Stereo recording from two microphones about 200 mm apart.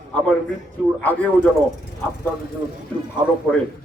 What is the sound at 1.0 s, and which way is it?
Speech, 10° left (ahead or behind).